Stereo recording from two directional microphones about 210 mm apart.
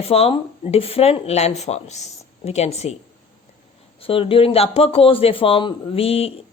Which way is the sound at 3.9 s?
25° left (ahead or behind).